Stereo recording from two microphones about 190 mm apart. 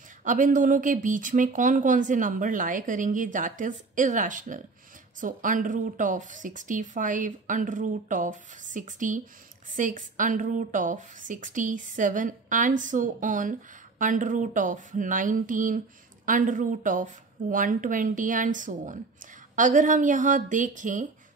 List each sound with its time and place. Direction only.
0.2 s a woman's voice: 40° right (ahead or behind)